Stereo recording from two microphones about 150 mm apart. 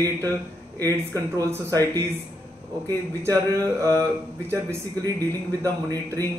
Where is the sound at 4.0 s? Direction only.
20° right (ahead or behind).